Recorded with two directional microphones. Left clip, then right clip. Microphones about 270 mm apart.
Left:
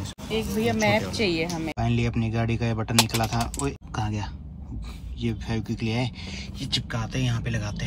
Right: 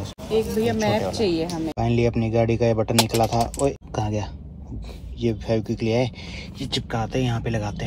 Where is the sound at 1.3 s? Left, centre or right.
Left.